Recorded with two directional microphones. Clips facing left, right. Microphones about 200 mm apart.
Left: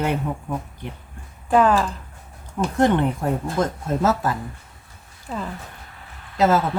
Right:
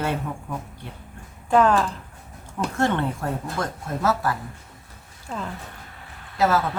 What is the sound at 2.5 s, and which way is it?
Speech, 15° left (ahead or behind).